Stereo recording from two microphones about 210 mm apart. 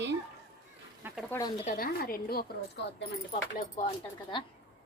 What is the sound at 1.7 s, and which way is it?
Speech, 45° left (ahead or behind).